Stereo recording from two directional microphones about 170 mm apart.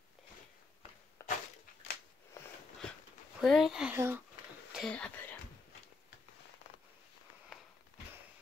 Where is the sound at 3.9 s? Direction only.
15° right (ahead or behind).